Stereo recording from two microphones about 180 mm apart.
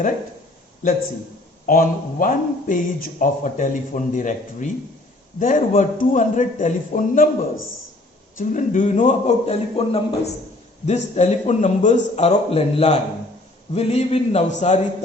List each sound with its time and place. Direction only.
0.8 s speech: 45° left (ahead or behind)
8.4 s a man's voice: 45° left (ahead or behind)